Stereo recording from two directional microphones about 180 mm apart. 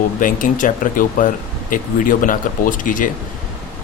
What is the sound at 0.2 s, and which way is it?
Speech, 50° left (ahead or behind).